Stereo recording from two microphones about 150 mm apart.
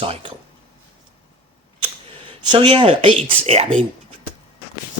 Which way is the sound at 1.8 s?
35° right (ahead or behind).